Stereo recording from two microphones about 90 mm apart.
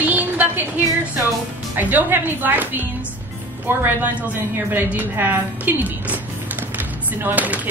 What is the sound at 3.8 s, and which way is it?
A woman's voice, 20° right (ahead or behind).